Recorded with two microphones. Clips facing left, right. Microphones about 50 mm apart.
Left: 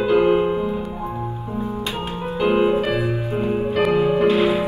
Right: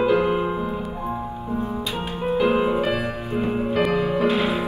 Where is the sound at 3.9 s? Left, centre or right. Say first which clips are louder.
Left 4 dB; centre.